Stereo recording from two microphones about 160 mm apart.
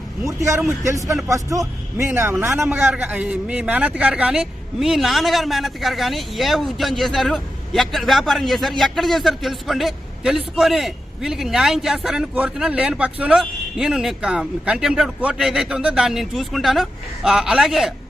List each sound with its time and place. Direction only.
0.3 s a man's voice: 15° right (ahead or behind); by 17.9 s centre (ahead or behind)